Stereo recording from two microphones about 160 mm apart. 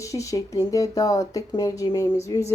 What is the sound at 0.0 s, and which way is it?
Speech, 20° left (ahead or behind).